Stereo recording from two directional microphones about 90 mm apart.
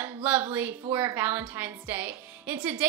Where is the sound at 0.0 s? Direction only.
20° right (ahead or behind).